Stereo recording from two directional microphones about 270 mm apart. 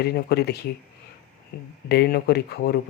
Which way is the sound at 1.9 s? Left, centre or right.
Left.